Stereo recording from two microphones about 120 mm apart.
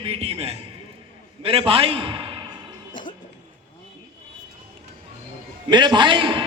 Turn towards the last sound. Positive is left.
turn(degrees=-40)  # may be behind; listen again after turning